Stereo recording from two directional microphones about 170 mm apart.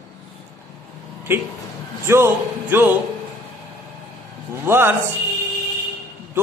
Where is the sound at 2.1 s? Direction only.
15° right (ahead or behind).